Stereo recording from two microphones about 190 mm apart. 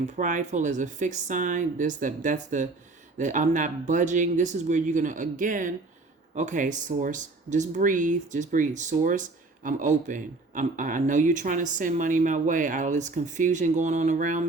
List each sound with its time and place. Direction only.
0.0 s speech: 40° right (ahead or behind)